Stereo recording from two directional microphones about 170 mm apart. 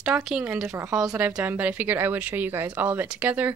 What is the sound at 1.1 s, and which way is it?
Speech, 10° right (ahead or behind).